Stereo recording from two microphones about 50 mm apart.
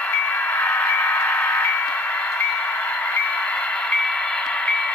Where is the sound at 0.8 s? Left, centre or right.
Left.